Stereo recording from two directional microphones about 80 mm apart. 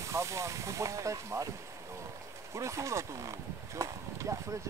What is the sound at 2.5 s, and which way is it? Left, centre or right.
Speech, right.